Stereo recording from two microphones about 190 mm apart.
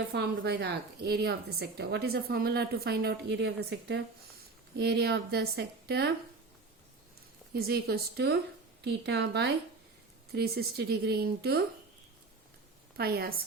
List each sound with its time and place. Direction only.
0.1 s a woman's voice: 60° right (ahead or behind)
7.5 s a woman's voice: 55° right (ahead or behind)
13.0 s a woman's voice: 55° right (ahead or behind)